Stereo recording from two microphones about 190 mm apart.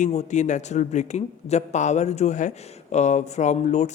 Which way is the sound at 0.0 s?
40° left (ahead or behind).